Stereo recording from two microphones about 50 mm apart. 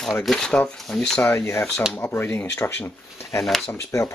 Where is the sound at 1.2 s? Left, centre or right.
Left.